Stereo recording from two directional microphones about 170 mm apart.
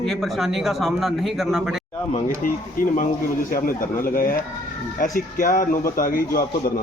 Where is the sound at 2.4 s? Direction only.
55° left (ahead or behind).